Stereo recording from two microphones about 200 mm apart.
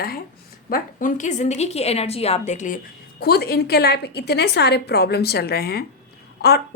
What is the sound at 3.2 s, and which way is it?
A woman's voice, 50° left (ahead or behind).